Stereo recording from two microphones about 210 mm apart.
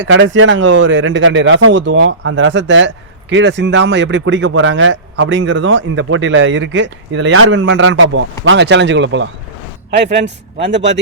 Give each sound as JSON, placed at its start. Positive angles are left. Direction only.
{"t": 0.0, "sound": "speech", "side_deg": -65}